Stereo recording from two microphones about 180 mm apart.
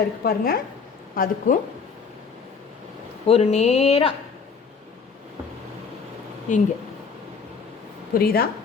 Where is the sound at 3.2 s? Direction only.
35° left (ahead or behind).